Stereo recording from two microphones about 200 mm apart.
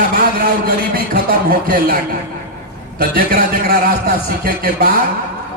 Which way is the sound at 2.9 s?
50° right (ahead or behind).